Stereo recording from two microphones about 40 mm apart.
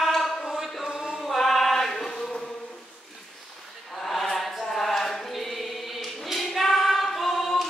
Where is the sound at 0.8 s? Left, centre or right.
Centre.